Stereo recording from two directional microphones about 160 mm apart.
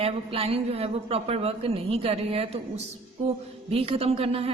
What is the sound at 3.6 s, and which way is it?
Speech, 35° right (ahead or behind).